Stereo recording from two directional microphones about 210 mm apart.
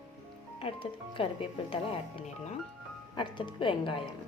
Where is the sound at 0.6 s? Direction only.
25° left (ahead or behind).